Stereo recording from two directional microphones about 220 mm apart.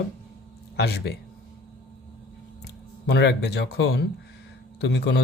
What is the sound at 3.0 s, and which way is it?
Speech, 50° left (ahead or behind).